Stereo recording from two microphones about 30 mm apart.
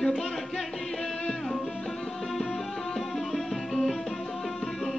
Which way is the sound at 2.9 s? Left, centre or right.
Centre.